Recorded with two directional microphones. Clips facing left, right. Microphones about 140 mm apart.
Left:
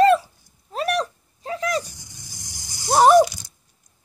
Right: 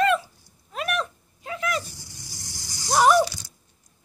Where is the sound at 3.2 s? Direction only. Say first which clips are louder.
Left 2 dB; 15° left (ahead or behind).